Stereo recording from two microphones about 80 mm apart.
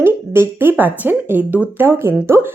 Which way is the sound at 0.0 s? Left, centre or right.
Right.